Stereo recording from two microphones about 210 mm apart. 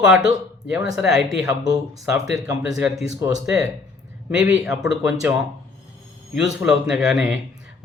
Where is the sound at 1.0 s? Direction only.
Centre (ahead or behind).